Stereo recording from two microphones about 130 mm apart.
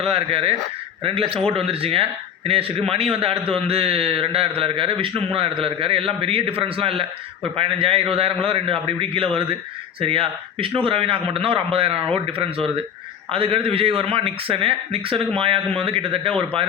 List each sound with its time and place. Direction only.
0.1 s a man's voice: 45° right (ahead or behind)